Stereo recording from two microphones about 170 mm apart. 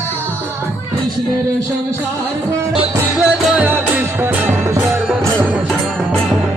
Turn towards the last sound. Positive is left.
turn(degrees=-15)  # may be behind; listen again after turning